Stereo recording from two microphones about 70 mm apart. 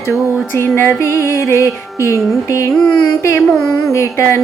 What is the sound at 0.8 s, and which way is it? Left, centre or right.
Music, left.